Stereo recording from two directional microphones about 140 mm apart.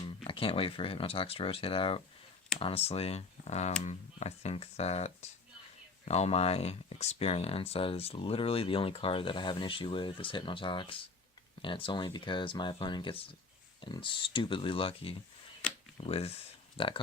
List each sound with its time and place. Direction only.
0.0 s speech: 40° left (ahead or behind)
15.6 s a sound: 10° left (ahead or behind)
16.0 s speech: 45° left (ahead or behind)